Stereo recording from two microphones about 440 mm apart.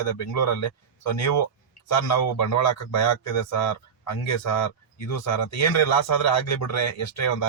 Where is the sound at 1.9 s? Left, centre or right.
Left.